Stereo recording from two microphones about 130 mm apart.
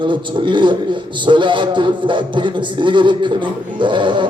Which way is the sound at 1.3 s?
40° right (ahead or behind).